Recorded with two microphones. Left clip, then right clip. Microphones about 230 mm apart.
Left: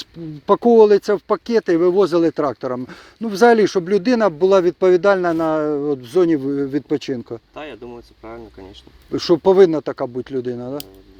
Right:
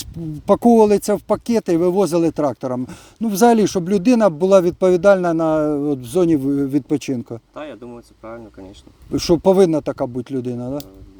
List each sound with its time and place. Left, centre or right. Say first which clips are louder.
0.0 s speech: right 1 dB; right
7.5 s speech: right 1 dB; centre
9.1 s speech: left 1 dB; right